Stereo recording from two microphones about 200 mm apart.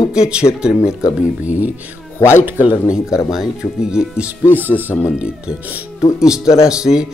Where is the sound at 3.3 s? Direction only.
5° right (ahead or behind).